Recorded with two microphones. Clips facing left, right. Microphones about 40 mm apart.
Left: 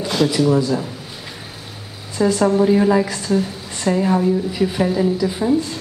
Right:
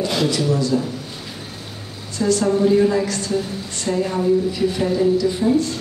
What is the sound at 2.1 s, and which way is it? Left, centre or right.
A woman's voice, centre.